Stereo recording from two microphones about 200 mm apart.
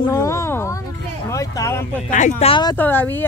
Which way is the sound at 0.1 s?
15° left (ahead or behind).